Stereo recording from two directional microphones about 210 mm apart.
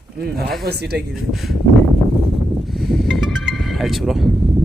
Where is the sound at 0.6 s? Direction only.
50° right (ahead or behind).